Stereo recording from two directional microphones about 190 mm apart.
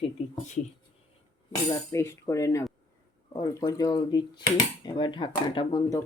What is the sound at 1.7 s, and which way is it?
Speech, 15° left (ahead or behind).